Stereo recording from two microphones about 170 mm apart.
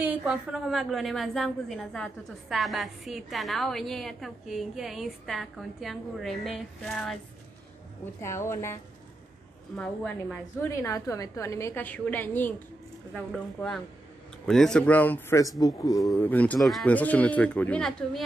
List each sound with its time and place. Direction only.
0.0 s a woman's voice: 10° right (ahead or behind)
6.9 s a woman's voice: 10° left (ahead or behind)
9.8 s a woman's voice: 10° left (ahead or behind)